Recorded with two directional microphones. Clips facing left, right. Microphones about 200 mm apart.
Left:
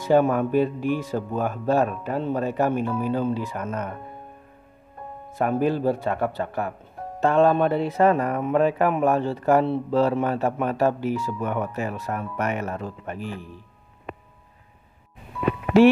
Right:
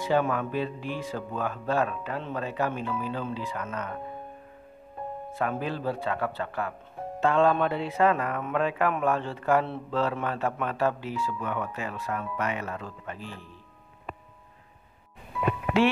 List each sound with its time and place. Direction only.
0.0 s speech: 45° left (ahead or behind)
5.4 s speech: 45° left (ahead or behind)
13.2 s speech: 10° left (ahead or behind)